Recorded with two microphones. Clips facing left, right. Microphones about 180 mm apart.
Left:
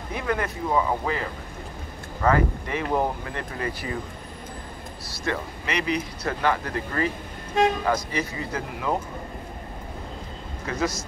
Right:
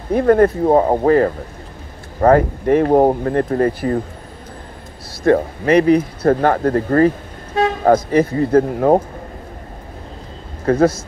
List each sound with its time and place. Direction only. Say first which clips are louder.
0.1 s speech: right 16 dB; 50° right (ahead or behind)
5.1 s speech: right 15 dB; 50° right (ahead or behind)
10.6 s a man's voice: right 13 dB; 55° right (ahead or behind)